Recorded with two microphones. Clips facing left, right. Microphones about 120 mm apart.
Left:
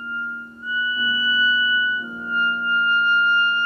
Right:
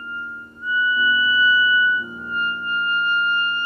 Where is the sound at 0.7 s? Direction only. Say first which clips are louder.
Right 4 dB; 25° left (ahead or behind).